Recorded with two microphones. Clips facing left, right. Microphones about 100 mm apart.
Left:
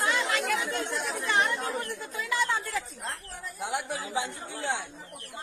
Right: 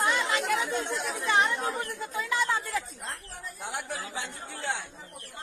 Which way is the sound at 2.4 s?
Centre (ahead or behind).